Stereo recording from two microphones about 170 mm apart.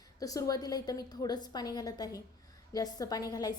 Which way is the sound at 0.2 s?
20° left (ahead or behind).